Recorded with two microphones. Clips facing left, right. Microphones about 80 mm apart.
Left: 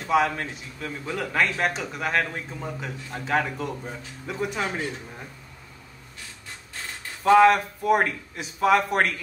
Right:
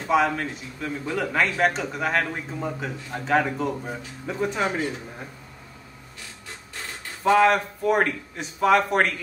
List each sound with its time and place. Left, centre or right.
0.1 s speech: centre
2.2 s a man's voice: centre
2.8 s speech: centre
4.4 s speech: right
7.2 s speech: centre